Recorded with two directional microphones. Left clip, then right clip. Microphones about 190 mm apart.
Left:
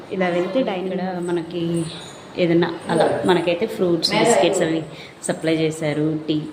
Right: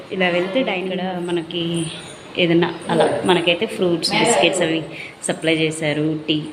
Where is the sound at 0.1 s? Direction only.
Centre (ahead or behind).